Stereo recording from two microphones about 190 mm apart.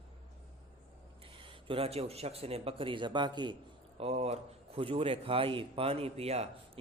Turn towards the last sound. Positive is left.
turn(degrees=-35)  # may be behind; listen again after turning